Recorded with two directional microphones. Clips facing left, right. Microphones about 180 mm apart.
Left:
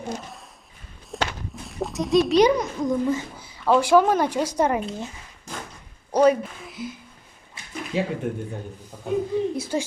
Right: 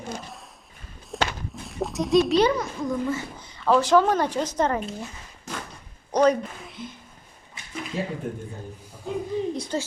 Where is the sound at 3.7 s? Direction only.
10° left (ahead or behind).